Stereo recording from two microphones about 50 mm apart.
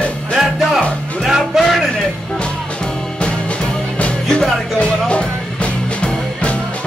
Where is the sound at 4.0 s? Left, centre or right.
Left.